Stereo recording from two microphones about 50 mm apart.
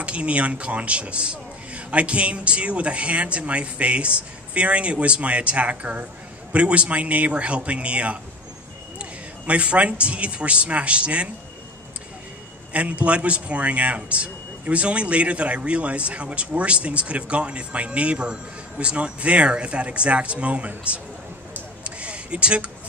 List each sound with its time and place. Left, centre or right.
0.0 s speech: right
9.5 s speech: right
12.7 s speech: right
21.8 s a sound: right